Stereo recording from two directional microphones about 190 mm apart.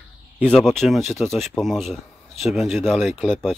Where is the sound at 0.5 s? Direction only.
Centre (ahead or behind).